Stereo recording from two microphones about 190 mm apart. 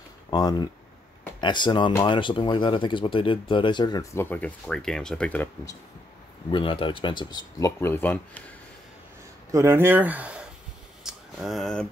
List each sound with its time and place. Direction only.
0.3 s speech: 20° left (ahead or behind)
6.5 s speech: 25° left (ahead or behind); by 8.5 s 10° left (ahead or behind)
9.5 s speech: 15° right (ahead or behind)
11.1 s a sound: centre (ahead or behind)